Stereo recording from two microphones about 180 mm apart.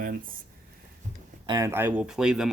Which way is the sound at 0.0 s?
50° right (ahead or behind).